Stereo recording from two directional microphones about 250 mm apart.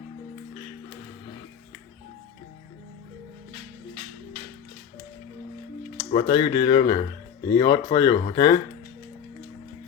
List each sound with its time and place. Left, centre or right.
6.1 s speech: left